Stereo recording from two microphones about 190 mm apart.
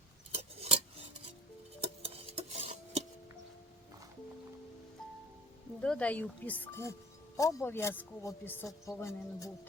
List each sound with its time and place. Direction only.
0.3 s cutlery: 35° right (ahead or behind)
1.8 s stir: 30° right (ahead or behind)
5.8 s speech: 5° left (ahead or behind)